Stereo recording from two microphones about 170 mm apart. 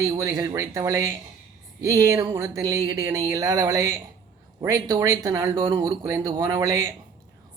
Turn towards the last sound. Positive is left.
turn(degrees=-20)  # may be behind; listen again after turning